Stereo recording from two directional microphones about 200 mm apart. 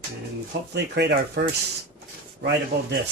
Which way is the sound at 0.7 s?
55° right (ahead or behind).